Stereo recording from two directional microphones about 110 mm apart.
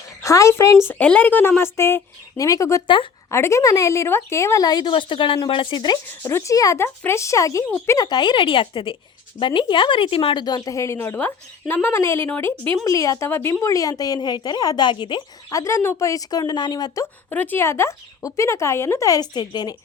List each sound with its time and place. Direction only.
0.2 s speech: 30° left (ahead or behind)
2.8 s speech: 50° left (ahead or behind)
3.2 s a woman's voice: 25° left (ahead or behind); by 6.0 s 45° left (ahead or behind)
6.2 s speech: 25° left (ahead or behind)
7.9 s speech: 40° left (ahead or behind)
10.4 s a woman's voice: 35° left (ahead or behind)
17.3 s speech: 15° left (ahead or behind); by 19.7 s 40° left (ahead or behind)